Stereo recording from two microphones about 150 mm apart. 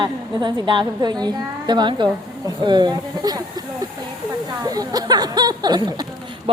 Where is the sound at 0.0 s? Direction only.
30° right (ahead or behind).